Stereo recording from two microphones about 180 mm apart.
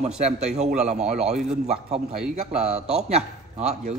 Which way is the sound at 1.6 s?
35° right (ahead or behind).